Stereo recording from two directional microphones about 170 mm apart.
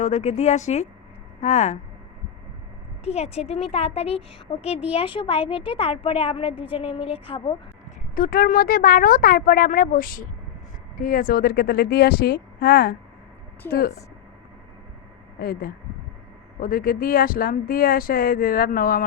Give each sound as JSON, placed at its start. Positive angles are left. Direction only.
{"t": 0.0, "sound": "a woman's voice", "side_deg": 40}
{"t": 3.0, "sound": "a woman's voice", "side_deg": 40}
{"t": 8.1, "sound": "speech", "side_deg": 55}
{"t": 15.4, "sound": "speech", "side_deg": 60}